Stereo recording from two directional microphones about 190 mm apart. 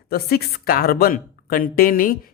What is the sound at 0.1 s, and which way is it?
Speech, 55° left (ahead or behind).